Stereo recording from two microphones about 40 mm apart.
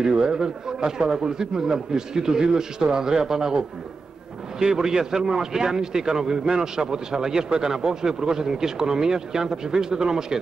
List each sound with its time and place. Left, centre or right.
0.0 s a man's voice: centre